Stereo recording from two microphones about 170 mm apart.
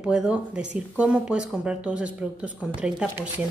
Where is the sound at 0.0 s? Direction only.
5° right (ahead or behind).